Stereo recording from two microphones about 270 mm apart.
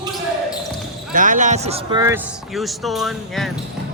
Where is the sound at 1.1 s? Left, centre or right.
Right; by 3.6 s centre.